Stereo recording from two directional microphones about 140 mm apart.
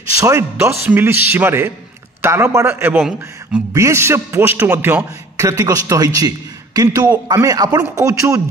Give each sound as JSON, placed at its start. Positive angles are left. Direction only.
{"t": 0.2, "sound": "a man's voice", "side_deg": -20}
{"t": 3.0, "sound": "a man's voice", "side_deg": -5}
{"t": 3.7, "sound": "a man's voice", "side_deg": -20}